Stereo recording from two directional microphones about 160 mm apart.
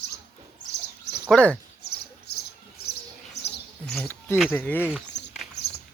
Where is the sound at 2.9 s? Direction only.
90° left.